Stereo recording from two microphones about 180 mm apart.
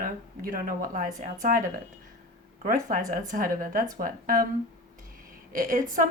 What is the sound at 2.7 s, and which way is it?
A woman's voice, 50° right (ahead or behind).